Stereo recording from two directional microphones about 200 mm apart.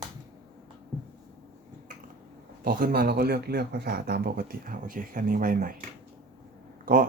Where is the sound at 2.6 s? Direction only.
45° right (ahead or behind).